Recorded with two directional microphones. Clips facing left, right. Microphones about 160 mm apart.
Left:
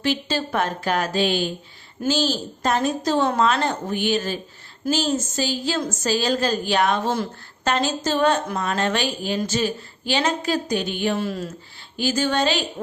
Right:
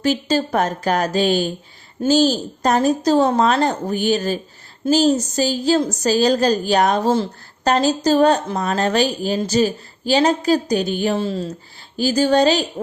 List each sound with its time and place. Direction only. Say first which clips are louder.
0.0 s a woman's voice: right 5 dB; 40° right (ahead or behind)
11.1 s a woman's voice: right 4 dB; 30° right (ahead or behind)